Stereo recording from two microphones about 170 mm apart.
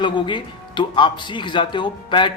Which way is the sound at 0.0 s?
30° left (ahead or behind).